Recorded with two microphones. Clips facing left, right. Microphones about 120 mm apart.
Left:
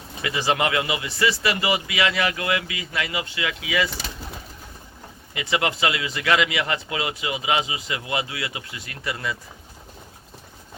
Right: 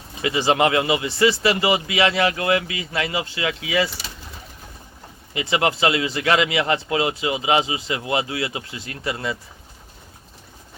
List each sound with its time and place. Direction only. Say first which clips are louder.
0.2 s speech: right 4 dB; 25° right (ahead or behind)
5.3 s speech: right 3 dB; 25° right (ahead or behind)